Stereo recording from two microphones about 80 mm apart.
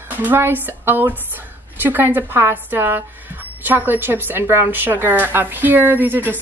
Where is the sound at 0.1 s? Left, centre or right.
Right.